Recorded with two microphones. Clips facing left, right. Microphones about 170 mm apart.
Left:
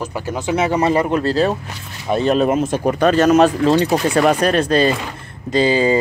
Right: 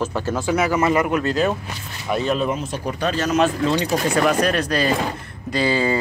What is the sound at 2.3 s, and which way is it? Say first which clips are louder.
Speech: left 7 dB; 50° left (ahead or behind).